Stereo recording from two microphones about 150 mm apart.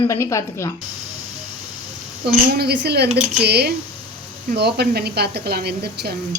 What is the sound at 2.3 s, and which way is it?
A woman's voice, 90° right.